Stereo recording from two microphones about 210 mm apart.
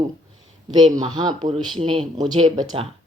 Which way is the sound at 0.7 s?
20° right (ahead or behind).